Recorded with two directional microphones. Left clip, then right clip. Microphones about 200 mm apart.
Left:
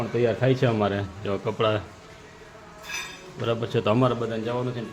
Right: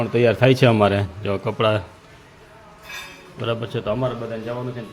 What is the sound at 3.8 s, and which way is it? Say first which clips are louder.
Speech: left 2 dB; 40° left (ahead or behind).